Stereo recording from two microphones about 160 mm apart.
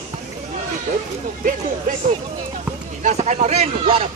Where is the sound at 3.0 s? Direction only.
45° right (ahead or behind).